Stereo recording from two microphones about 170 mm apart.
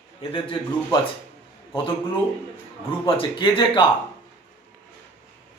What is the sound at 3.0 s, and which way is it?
Speech, 30° left (ahead or behind).